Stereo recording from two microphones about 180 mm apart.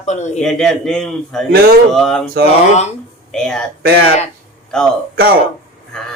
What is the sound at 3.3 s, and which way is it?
Speech, 5° left (ahead or behind).